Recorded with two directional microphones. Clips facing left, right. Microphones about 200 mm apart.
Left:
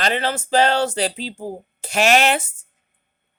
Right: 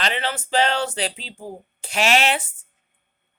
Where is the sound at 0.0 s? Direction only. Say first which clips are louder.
Left 4 dB; 40° left (ahead or behind).